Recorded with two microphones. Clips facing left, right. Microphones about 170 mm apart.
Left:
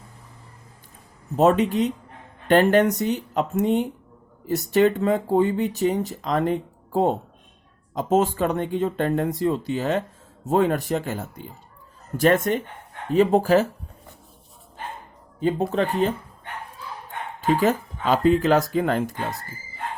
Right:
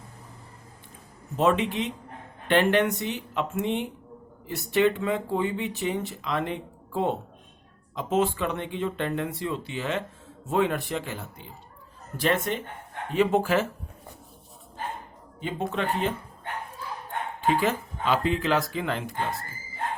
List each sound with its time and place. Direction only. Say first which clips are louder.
1.4 s speech: left 5 dB; 40° left (ahead or behind)
15.4 s speech: left 7 dB; 40° left (ahead or behind)
17.4 s speech: left 4 dB; 40° left (ahead or behind)